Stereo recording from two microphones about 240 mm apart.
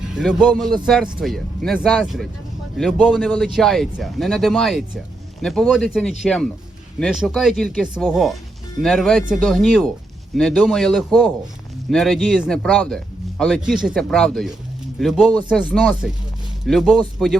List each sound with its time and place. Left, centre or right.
0.1 s speech: centre